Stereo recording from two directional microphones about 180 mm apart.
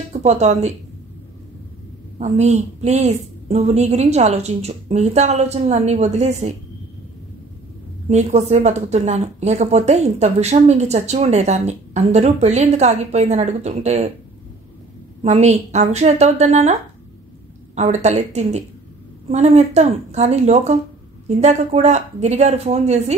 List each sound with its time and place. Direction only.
0.2 s speech: 40° right (ahead or behind)
2.1 s speech: 40° right (ahead or behind)
8.1 s speech: 40° right (ahead or behind)
15.2 s speech: 40° right (ahead or behind)
17.7 s speech: 40° right (ahead or behind)